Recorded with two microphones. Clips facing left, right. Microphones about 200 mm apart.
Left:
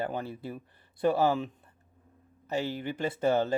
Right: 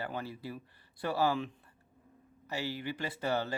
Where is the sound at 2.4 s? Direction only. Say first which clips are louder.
Left 5 dB; 20° left (ahead or behind).